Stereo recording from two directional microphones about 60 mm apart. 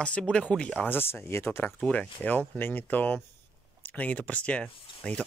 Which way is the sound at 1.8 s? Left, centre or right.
Centre.